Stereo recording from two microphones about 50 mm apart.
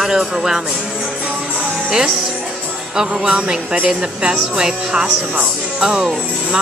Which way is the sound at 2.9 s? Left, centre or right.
Centre.